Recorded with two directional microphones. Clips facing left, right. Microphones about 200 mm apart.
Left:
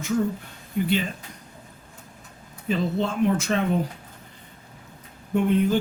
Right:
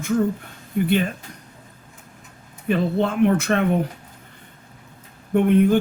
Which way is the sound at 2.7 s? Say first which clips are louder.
Right 4 dB; 60° right (ahead or behind).